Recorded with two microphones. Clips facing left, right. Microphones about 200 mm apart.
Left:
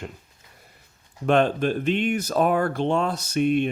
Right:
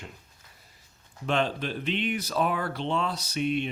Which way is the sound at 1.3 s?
50° left (ahead or behind).